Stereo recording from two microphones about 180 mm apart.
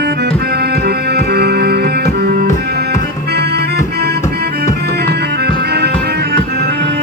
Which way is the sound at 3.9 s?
65° right (ahead or behind).